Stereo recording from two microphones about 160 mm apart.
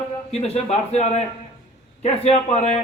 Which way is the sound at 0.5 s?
40° left (ahead or behind).